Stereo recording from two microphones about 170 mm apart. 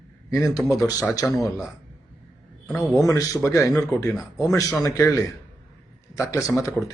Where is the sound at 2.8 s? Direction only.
20° left (ahead or behind).